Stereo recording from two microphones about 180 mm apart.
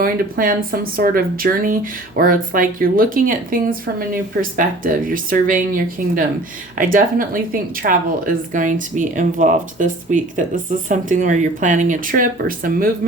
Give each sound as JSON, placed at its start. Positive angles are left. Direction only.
{"t": 0.0, "sound": "speech", "side_deg": -50}